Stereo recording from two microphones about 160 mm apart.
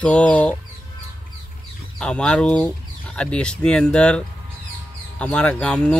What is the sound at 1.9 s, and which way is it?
Speech, 5° left (ahead or behind).